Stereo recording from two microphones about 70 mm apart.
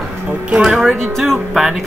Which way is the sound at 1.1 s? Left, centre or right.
Centre.